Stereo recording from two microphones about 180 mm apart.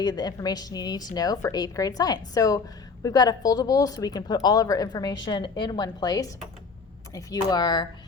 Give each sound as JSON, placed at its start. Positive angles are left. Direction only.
{"t": 0.0, "sound": "a woman's voice", "side_deg": 20}